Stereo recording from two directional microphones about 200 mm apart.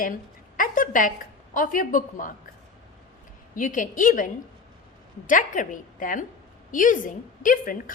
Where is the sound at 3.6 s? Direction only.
40° left (ahead or behind).